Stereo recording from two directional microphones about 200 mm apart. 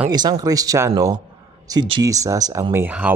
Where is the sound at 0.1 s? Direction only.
20° right (ahead or behind).